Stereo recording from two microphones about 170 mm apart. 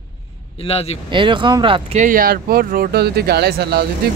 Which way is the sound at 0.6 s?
35° left (ahead or behind).